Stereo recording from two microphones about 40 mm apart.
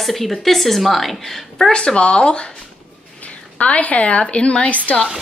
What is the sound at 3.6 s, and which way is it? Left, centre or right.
A woman's voice, left.